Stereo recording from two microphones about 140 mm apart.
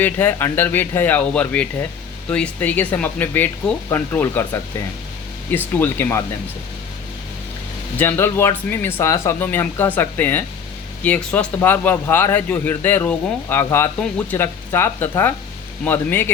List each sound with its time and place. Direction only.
0.0 s speech: 15° left (ahead or behind)
5.5 s speech: 15° left (ahead or behind)
7.9 s speech: 15° left (ahead or behind)